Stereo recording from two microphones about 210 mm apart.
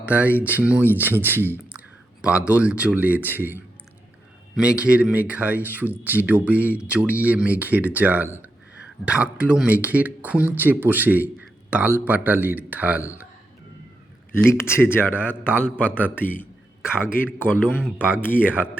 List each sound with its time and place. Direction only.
0.0 s speech: 5° right (ahead or behind)
14.4 s speech: 10° left (ahead or behind)
17.2 s a man's voice: 40° left (ahead or behind)
17.7 s speech: 5° right (ahead or behind)
18.2 s speech: 10° left (ahead or behind)